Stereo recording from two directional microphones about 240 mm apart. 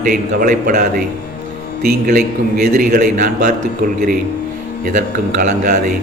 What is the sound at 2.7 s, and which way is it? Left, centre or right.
Mantra, right.